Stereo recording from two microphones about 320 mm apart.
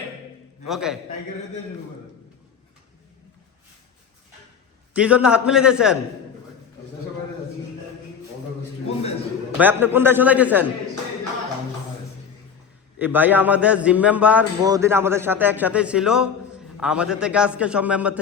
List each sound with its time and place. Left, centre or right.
0.7 s a man's voice: centre
4.9 s a man's voice: centre
9.6 s a man's voice: centre
13.0 s a man's voice: centre